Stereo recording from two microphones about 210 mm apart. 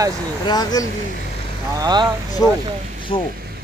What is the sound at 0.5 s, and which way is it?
Speech, 20° left (ahead or behind).